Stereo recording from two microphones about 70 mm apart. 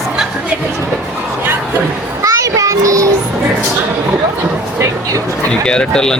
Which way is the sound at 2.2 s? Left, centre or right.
Right.